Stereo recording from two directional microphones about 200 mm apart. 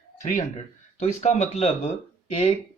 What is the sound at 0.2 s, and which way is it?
Speech, 35° left (ahead or behind).